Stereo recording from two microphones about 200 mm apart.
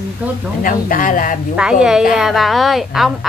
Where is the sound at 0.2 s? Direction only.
5° right (ahead or behind).